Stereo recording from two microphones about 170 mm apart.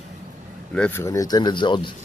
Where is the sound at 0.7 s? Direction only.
10° left (ahead or behind); by 1.8 s 30° left (ahead or behind).